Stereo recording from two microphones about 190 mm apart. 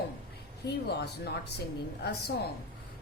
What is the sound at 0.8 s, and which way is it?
Speech, 60° left (ahead or behind).